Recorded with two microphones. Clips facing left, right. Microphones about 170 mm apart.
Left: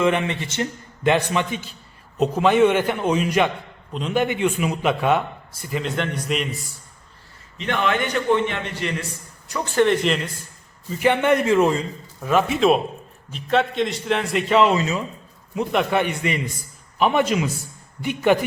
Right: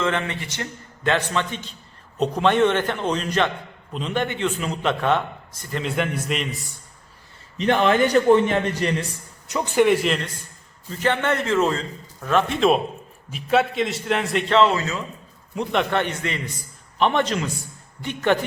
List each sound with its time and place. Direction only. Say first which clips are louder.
0.0 s a man's voice: left 4 dB; 15° left (ahead or behind); by 6.7 s centre (ahead or behind)
7.6 s a man's voice: right 5 dB; 35° right (ahead or behind)
9.5 s a man's voice: right 1 dB; 15° right (ahead or behind); by 14.6 s centre (ahead or behind)
14.6 s a man's voice: left 1 dB; 20° left (ahead or behind)
15.5 s a man's voice: left 2 dB; 5° left (ahead or behind)